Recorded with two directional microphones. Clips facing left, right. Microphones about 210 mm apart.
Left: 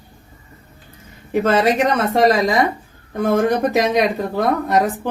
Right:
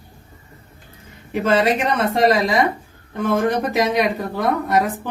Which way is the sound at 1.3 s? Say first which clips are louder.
Left 2 dB; 45° left (ahead or behind).